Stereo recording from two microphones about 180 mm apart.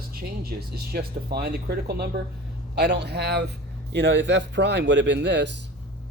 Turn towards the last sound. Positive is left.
turn(degrees=-75)  # may be behind; listen again after turning